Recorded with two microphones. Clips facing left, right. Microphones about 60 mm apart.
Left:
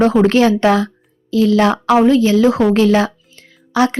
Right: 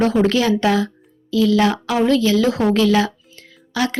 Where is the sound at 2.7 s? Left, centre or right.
Left.